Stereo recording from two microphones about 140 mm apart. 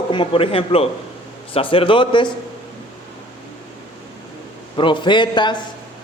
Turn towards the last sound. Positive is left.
turn(degrees=35)  # may be behind; listen again after turning